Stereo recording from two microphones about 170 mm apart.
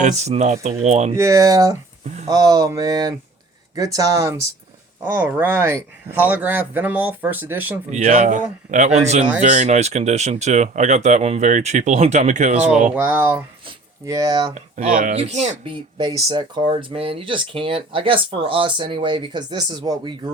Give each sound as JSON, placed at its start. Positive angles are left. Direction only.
{"t": 0.0, "sound": "speech", "side_deg": -40}
{"t": 1.1, "sound": "speech", "side_deg": -20}
{"t": 7.9, "sound": "speech", "side_deg": -45}
{"t": 13.0, "sound": "speech", "side_deg": -10}
{"t": 14.5, "sound": "speech", "side_deg": -45}
{"t": 15.7, "sound": "speech", "side_deg": -25}